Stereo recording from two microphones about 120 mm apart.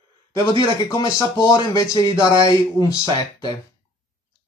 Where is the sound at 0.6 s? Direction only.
25° left (ahead or behind).